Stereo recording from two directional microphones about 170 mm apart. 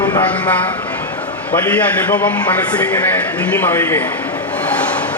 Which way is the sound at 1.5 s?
10° left (ahead or behind).